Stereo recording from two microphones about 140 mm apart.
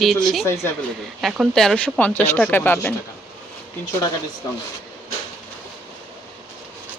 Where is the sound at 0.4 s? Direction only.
15° left (ahead or behind).